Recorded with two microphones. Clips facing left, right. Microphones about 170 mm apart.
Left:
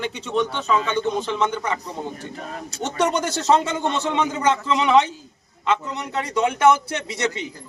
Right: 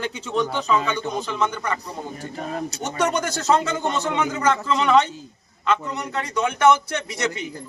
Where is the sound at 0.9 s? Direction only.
25° left (ahead or behind).